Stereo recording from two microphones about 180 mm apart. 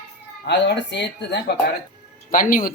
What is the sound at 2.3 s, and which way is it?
Speech, 50° left (ahead or behind).